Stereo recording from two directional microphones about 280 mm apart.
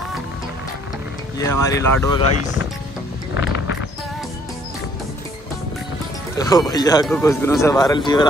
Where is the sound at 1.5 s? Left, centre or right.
Centre.